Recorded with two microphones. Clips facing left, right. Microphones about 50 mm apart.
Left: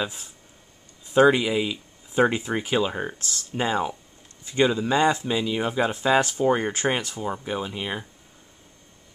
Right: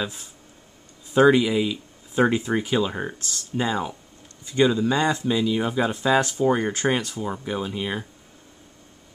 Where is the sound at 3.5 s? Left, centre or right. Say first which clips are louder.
Even; left; by 8.0 s centre.